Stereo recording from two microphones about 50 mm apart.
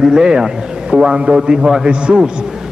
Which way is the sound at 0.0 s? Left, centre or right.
Centre.